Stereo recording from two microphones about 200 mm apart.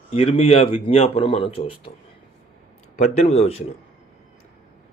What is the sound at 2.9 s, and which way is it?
Speech, 30° left (ahead or behind).